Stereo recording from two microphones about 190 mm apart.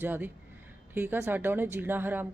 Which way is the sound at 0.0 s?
10° right (ahead or behind).